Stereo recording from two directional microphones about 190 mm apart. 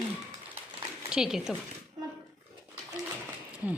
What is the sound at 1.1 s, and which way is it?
Speech, 5° right (ahead or behind).